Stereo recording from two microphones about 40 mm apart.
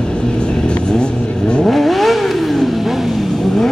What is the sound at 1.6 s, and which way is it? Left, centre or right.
Vehicle, centre.